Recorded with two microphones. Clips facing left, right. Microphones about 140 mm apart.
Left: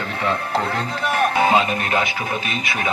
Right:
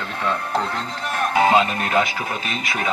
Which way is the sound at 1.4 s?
5° left (ahead or behind).